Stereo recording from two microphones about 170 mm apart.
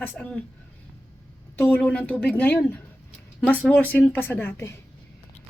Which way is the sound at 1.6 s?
10° left (ahead or behind).